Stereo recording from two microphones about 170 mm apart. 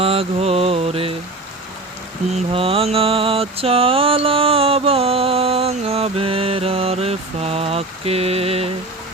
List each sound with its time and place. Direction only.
0.0 s mantra: 35° right (ahead or behind)
2.3 s mantra: 35° right (ahead or behind)